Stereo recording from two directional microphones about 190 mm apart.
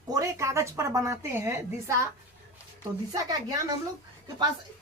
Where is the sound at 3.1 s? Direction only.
20° right (ahead or behind).